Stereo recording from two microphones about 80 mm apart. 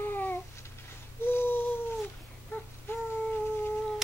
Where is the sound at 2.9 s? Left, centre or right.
Left.